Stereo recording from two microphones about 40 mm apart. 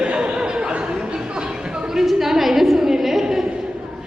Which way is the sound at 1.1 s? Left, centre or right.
Right.